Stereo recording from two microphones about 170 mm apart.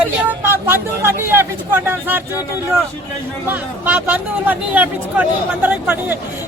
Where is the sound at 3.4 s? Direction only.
10° right (ahead or behind).